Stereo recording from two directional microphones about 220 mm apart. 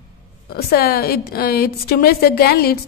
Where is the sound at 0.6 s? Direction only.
45° left (ahead or behind).